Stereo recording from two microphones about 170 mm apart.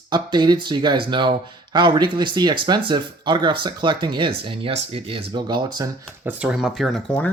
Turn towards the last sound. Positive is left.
turn(degrees=5)  # may be behind; listen again after turning